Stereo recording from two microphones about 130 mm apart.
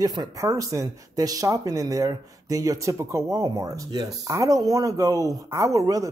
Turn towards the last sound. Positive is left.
turn(degrees=-25)  # may be behind; listen again after turning